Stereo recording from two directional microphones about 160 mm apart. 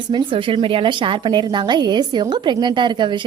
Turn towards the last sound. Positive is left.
turn(degrees=-30)  # may be behind; listen again after turning